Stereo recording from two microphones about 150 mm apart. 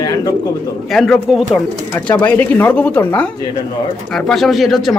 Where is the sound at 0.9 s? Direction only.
Centre (ahead or behind).